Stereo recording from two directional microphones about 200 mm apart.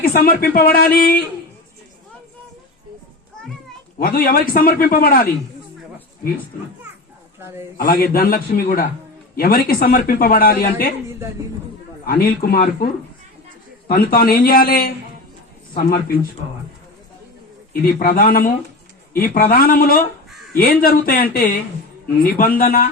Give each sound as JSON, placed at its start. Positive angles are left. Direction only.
{"t": 0.0, "sound": "a man's voice", "side_deg": 50}
{"t": 3.9, "sound": "a man's voice", "side_deg": 45}
{"t": 7.8, "sound": "a man's voice", "side_deg": 45}
{"t": 12.0, "sound": "a man's voice", "side_deg": 50}
{"t": 18.0, "sound": "a man's voice", "side_deg": 45}